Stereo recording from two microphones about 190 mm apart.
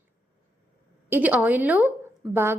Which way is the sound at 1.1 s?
10° right (ahead or behind).